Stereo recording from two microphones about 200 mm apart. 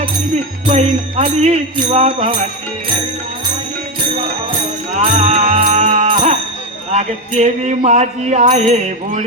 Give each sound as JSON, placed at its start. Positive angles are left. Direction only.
{"t": 0.7, "sound": "music", "side_deg": -35}
{"t": 4.9, "sound": "music", "side_deg": -35}